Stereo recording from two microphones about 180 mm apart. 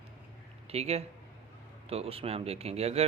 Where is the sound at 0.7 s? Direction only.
35° right (ahead or behind).